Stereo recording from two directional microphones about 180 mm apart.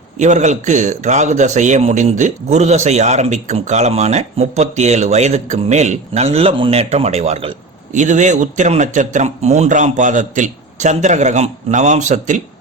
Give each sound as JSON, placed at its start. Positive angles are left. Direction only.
{"t": 0.2, "sound": "a man's voice", "side_deg": -40}